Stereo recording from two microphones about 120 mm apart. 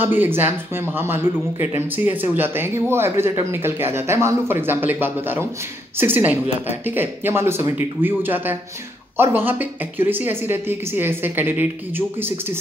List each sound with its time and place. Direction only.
0.0 s a woman's voice: 15° right (ahead or behind)